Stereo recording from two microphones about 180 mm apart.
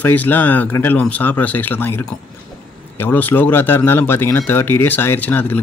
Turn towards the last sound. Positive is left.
turn(degrees=10)  # may be behind; listen again after turning